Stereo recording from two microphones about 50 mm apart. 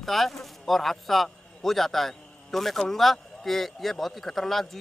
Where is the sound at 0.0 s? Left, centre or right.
Centre.